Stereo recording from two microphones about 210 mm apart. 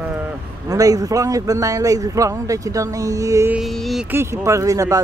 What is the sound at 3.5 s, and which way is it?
Speech, centre (ahead or behind).